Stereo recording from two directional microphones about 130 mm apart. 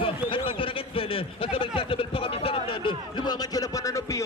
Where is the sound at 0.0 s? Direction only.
40° left (ahead or behind).